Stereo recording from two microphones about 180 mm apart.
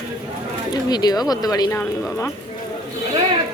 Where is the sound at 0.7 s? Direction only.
20° left (ahead or behind).